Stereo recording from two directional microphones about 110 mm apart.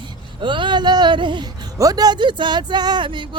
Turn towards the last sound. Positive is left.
turn(degrees=-50)  # may be behind; listen again after turning